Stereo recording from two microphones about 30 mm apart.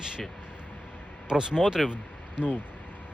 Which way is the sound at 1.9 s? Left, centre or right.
Right.